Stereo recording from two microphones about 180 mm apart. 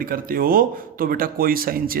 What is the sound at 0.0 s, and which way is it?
Speech, 50° right (ahead or behind).